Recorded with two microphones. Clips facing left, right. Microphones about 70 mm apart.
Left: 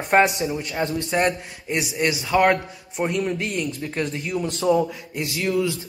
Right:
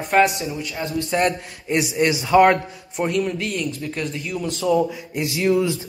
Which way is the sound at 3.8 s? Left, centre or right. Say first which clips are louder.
Left 1 dB; left.